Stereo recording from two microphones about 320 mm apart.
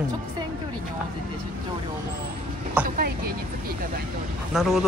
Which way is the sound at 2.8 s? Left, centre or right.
Right.